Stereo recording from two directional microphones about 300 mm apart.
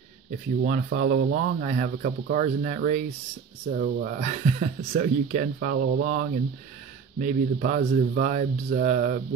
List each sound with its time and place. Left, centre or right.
0.7 s speech: right